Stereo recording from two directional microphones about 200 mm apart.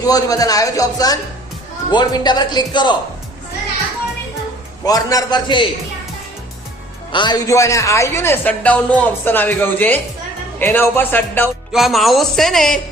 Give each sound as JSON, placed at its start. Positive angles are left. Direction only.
{"t": 0.0, "sound": "a man's voice", "side_deg": 20}
{"t": 4.9, "sound": "a man's voice", "side_deg": 15}
{"t": 7.1, "sound": "speech", "side_deg": 20}
{"t": 11.7, "sound": "speech", "side_deg": 0}